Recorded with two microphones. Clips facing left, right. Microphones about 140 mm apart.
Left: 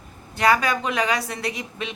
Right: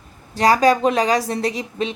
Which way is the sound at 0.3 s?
35° right (ahead or behind).